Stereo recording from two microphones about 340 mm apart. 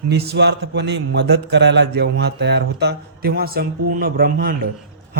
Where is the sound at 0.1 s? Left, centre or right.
Right.